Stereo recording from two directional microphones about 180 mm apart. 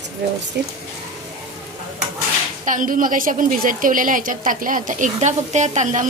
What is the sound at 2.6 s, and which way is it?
A woman's voice, 45° right (ahead or behind).